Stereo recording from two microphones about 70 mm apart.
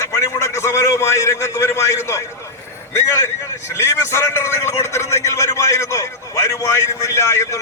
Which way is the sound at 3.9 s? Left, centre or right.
Left.